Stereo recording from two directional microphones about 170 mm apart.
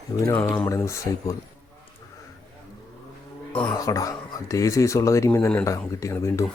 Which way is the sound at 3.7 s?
20° left (ahead or behind).